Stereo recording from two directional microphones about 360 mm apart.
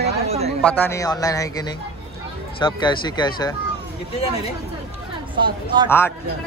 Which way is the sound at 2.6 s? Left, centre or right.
Centre.